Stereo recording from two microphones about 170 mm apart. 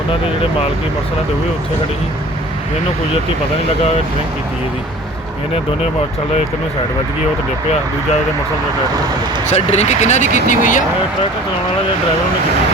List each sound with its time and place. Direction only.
9.5 s speech: 40° left (ahead or behind)